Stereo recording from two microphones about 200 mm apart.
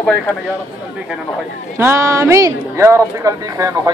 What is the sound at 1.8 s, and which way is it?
Speech, 15° right (ahead or behind).